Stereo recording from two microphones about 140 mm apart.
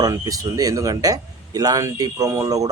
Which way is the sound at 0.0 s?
25° right (ahead or behind).